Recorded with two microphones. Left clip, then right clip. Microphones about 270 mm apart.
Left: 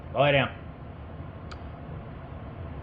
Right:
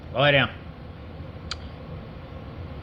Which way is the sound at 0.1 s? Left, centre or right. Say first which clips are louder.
Right 3 dB; right.